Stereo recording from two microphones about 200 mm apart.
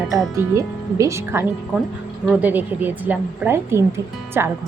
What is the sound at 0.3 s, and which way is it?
A woman's voice, 15° right (ahead or behind).